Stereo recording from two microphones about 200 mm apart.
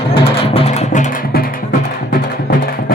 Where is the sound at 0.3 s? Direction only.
30° left (ahead or behind); by 1.5 s 45° left (ahead or behind).